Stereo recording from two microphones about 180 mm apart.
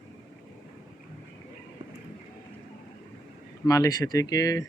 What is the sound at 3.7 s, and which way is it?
Speech, 20° left (ahead or behind).